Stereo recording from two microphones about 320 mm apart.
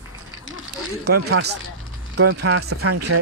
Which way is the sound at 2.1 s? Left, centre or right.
Right.